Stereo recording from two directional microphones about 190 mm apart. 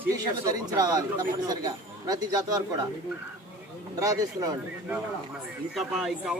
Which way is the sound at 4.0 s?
20° right (ahead or behind).